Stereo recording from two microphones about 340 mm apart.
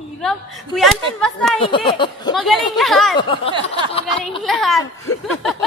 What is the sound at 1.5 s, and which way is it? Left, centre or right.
Speech, centre.